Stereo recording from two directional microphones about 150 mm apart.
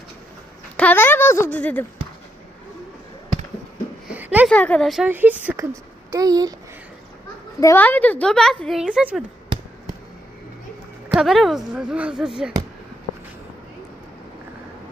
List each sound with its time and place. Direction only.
0.8 s a sound: 10° left (ahead or behind)
1.5 s speech: 10° left (ahead or behind)
4.1 s a sound: 10° right (ahead or behind)
4.4 s a woman's voice: 10° left (ahead or behind)
5.0 s speech: 10° right (ahead or behind)
6.1 s speech: 25° right (ahead or behind)
7.6 s a woman's voice: 15° left (ahead or behind); by 9.2 s 5° right (ahead or behind)
11.2 s a woman's voice: centre (ahead or behind)